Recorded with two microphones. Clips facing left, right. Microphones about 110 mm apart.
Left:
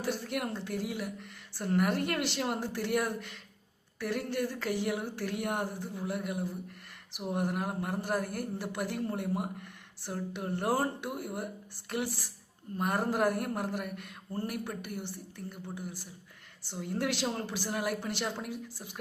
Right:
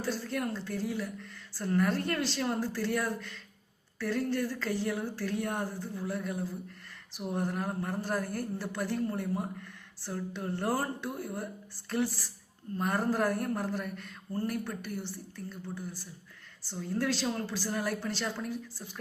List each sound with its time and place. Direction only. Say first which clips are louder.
0.0 s a woman's voice: even; 15° left (ahead or behind)